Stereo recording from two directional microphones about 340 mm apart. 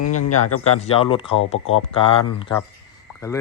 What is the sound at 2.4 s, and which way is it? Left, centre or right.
Speech, centre.